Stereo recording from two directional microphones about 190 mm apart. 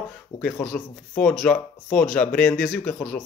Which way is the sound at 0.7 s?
5° left (ahead or behind).